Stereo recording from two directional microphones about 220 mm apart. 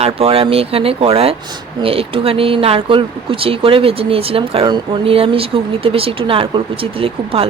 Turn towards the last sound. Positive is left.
turn(degrees=-25)  # may be behind; listen again after turning